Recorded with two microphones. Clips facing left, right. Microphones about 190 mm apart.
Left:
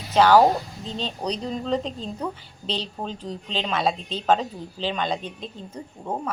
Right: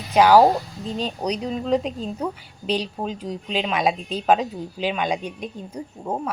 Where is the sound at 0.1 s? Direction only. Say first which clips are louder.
Right 2 dB; 10° right (ahead or behind).